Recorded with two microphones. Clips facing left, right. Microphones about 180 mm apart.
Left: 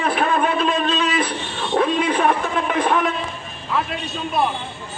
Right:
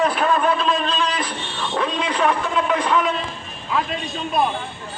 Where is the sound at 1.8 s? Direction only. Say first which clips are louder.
Left 4 dB; 55° left (ahead or behind).